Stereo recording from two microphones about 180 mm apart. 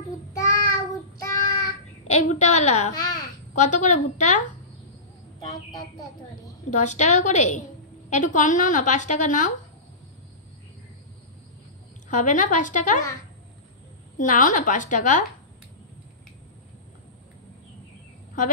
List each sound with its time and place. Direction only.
0.3 s child singing: 15° left (ahead or behind)
2.0 s a woman's voice: 40° left (ahead or behind)
3.0 s babbling: 20° left (ahead or behind)
3.5 s a woman's voice: 45° left (ahead or behind)
6.7 s a woman's voice: 40° left (ahead or behind)
12.1 s a woman's voice: 45° left (ahead or behind)
14.1 s a woman's voice: 45° left (ahead or behind)